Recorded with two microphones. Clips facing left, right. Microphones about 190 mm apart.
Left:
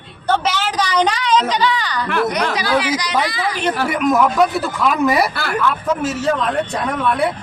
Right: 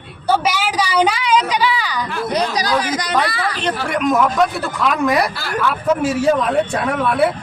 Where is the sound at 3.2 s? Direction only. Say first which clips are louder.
Even; 60° right (ahead or behind).